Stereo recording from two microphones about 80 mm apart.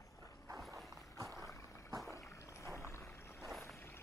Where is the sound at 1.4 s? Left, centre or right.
Left.